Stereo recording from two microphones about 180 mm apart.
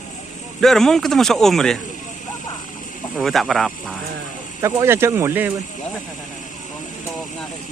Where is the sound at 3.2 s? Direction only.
Centre (ahead or behind).